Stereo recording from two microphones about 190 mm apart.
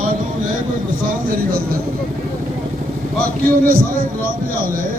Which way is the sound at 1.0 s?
50° right (ahead or behind).